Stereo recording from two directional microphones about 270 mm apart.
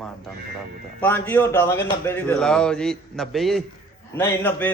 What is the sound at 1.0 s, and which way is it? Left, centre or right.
A man's voice, centre.